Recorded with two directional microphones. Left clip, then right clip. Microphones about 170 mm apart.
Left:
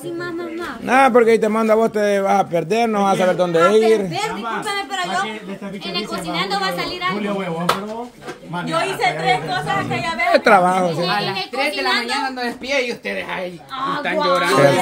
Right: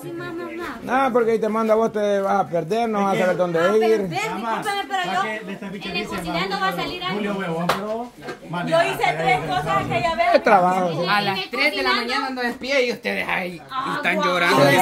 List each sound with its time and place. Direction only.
0.8 s a man's voice: 40° left (ahead or behind)
6.3 s a woman's voice: 30° left (ahead or behind)
8.7 s a man's voice: 20° left (ahead or behind)
11.1 s a woman's voice: 45° right (ahead or behind)
12.1 s speech: 10° right (ahead or behind)
13.0 s a woman's voice: 50° right (ahead or behind)
14.0 s speech: 65° right (ahead or behind)